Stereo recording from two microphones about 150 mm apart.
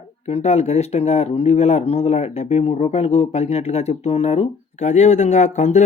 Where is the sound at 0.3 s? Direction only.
45° left (ahead or behind).